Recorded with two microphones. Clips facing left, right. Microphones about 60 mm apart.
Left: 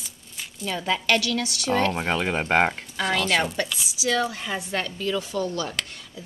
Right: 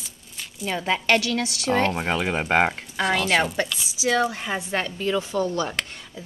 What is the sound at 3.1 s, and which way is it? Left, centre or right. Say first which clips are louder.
Speech: right 2 dB; right.